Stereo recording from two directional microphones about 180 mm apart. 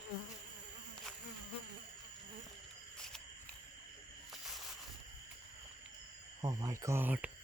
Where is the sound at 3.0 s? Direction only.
5° left (ahead or behind).